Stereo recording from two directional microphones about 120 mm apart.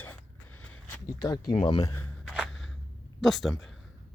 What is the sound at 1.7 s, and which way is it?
Speech, 30° left (ahead or behind).